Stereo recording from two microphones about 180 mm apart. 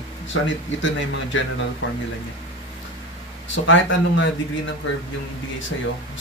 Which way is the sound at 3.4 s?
90° left.